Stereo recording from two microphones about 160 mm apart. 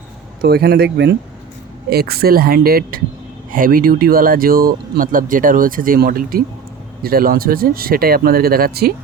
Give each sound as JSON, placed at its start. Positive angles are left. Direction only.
{"t": 0.4, "sound": "speech", "side_deg": -90}
{"t": 1.9, "sound": "speech", "side_deg": -80}